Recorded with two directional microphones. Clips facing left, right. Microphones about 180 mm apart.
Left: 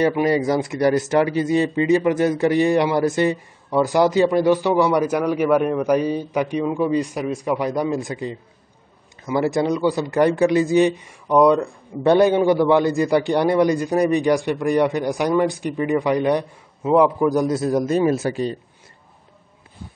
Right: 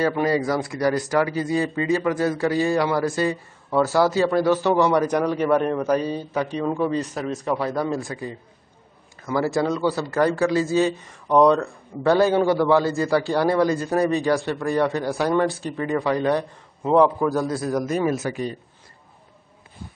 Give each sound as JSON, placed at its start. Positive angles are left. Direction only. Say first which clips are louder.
{"t": 0.0, "sound": "a man's voice", "louder": "left 3 dB", "side_deg": 20}